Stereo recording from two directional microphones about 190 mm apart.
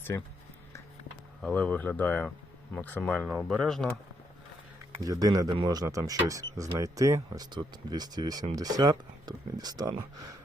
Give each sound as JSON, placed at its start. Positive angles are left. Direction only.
{"t": 0.1, "sound": "speech", "side_deg": 15}
{"t": 1.4, "sound": "speech", "side_deg": 5}
{"t": 5.0, "sound": "speech", "side_deg": -20}